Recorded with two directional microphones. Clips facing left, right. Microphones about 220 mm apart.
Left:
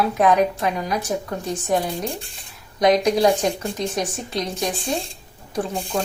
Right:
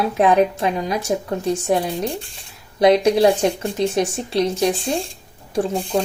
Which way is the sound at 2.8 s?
30° right (ahead or behind).